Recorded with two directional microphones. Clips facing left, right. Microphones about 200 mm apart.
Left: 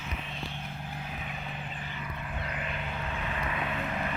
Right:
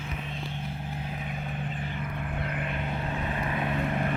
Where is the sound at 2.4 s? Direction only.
50° right (ahead or behind).